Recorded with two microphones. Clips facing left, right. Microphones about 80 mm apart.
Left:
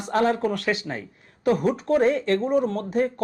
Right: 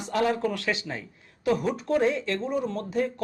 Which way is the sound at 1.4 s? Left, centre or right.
Left.